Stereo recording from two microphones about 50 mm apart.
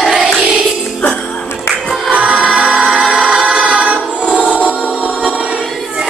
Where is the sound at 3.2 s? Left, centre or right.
Right.